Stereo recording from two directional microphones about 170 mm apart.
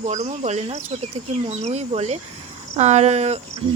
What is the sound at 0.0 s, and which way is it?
A woman's voice, 45° right (ahead or behind).